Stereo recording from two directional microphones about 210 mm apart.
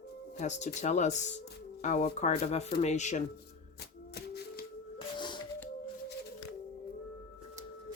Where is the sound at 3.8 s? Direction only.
50° left (ahead or behind).